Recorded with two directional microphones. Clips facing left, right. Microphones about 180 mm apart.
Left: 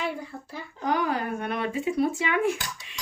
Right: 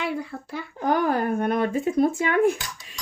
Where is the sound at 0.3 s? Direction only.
60° right (ahead or behind).